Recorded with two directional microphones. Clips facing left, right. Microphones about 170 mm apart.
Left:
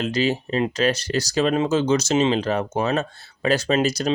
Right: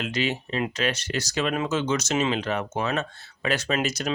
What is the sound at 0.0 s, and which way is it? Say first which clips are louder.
Speech: left 5 dB; 35° left (ahead or behind).